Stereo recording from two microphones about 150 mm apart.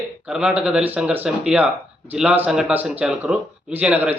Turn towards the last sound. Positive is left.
turn(degrees=-10)  # may be behind; listen again after turning